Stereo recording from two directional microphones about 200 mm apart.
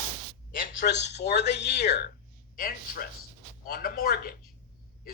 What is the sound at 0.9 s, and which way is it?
Speech, 60° left (ahead or behind).